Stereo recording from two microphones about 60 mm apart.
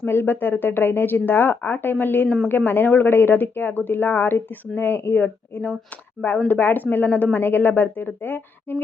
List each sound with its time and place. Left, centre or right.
0.0 s speech: left
6.5 s speech: left